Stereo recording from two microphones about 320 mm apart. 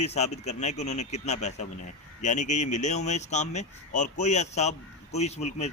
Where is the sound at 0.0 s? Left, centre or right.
Centre.